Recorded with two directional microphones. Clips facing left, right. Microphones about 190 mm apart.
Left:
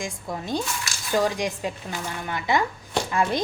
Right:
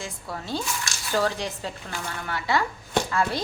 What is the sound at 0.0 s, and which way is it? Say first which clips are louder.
A woman's voice: left 4 dB; 15° left (ahead or behind).